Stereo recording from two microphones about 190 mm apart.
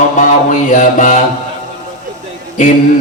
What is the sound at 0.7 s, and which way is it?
Mantra, 40° left (ahead or behind).